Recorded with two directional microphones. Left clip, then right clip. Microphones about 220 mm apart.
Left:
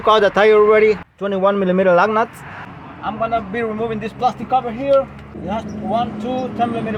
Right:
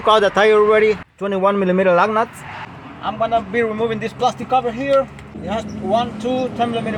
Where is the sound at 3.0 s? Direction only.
20° right (ahead or behind).